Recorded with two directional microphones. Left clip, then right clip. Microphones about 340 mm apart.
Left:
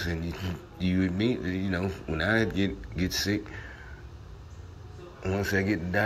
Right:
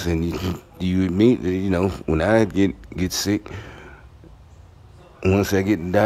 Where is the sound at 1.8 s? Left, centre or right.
Right.